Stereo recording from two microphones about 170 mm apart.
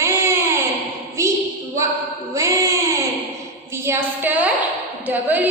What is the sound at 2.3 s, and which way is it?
Speech, 20° right (ahead or behind).